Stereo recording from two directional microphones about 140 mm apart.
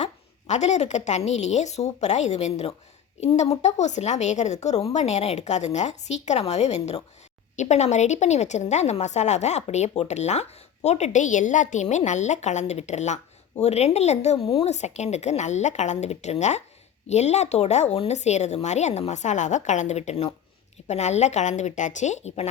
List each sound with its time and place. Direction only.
0.0 s a woman's voice: 55° left (ahead or behind)